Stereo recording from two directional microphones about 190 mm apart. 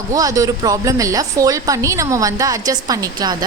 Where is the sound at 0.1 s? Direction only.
20° right (ahead or behind).